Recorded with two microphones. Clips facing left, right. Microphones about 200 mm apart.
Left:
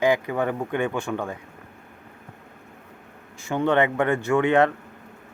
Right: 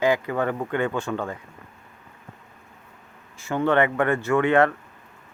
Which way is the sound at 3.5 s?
15° left (ahead or behind).